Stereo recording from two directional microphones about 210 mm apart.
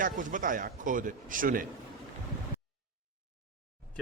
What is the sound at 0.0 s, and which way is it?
Speech, 40° right (ahead or behind).